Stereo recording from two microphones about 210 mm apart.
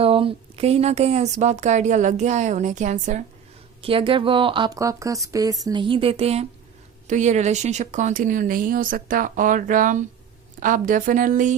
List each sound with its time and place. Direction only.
0.0 s a woman's voice: 25° right (ahead or behind)
3.8 s a woman's voice: 25° right (ahead or behind)